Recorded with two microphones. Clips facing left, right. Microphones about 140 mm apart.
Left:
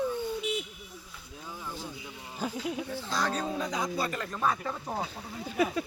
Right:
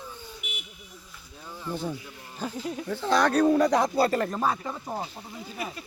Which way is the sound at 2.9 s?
65° right (ahead or behind).